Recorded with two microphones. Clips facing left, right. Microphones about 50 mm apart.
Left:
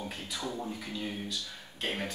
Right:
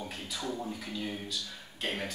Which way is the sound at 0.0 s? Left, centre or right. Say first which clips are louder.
Even; centre.